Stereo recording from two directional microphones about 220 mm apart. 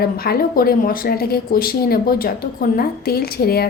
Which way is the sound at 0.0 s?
45° left (ahead or behind).